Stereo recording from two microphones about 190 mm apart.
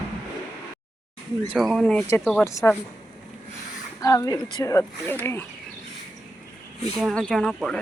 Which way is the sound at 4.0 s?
20° left (ahead or behind).